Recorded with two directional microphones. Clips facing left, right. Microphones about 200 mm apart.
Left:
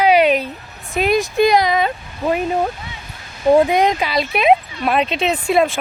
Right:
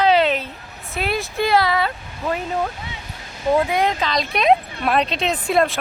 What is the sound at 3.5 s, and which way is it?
Speech, 25° left (ahead or behind).